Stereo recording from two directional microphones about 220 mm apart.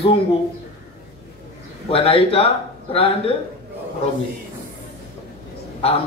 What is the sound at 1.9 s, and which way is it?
A man's voice, 25° left (ahead or behind).